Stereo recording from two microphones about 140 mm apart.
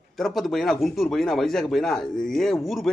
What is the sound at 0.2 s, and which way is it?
A man's voice, centre (ahead or behind).